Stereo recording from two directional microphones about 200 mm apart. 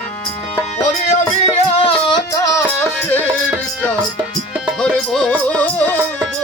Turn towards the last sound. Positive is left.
turn(degrees=5)  # may be behind; listen again after turning